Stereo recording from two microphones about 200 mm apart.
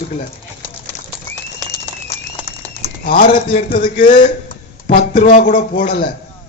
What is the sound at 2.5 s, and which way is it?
Bird, 50° left (ahead or behind).